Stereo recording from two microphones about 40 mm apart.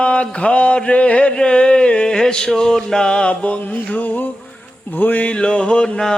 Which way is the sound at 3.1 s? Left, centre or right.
Left.